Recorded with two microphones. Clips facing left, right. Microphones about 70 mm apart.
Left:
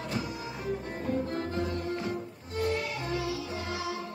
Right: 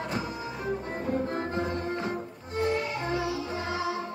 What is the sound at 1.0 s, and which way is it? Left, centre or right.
Music, right.